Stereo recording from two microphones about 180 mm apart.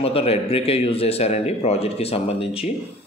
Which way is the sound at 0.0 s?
30° left (ahead or behind).